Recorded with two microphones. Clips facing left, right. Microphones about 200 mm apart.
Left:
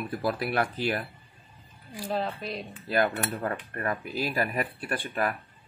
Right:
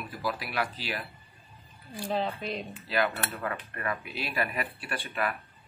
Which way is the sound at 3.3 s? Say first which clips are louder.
Left 3 dB; 35° left (ahead or behind).